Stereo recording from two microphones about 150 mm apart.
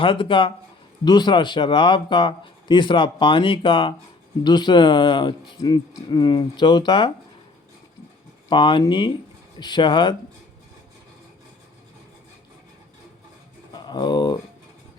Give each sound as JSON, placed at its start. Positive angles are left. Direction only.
{"t": 0.0, "sound": "a man's voice", "side_deg": 35}
{"t": 8.4, "sound": "a man's voice", "side_deg": 35}
{"t": 13.7, "sound": "speech", "side_deg": 30}